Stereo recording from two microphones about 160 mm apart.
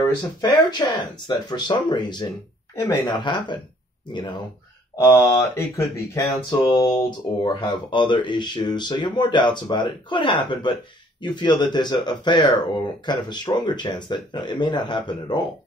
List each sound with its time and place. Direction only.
0.0 s speech: 25° left (ahead or behind)